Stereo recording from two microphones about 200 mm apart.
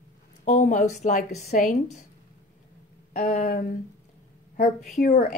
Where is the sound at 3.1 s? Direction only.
40° left (ahead or behind).